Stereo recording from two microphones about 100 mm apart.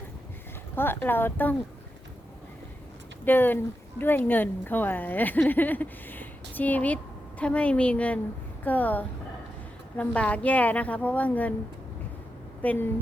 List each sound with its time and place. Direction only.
0.8 s speech: 20° left (ahead or behind)
3.2 s speech: 20° left (ahead or behind)
12.6 s speech: 20° left (ahead or behind)